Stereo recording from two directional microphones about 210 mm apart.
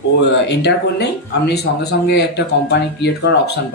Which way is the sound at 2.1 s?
55° left (ahead or behind).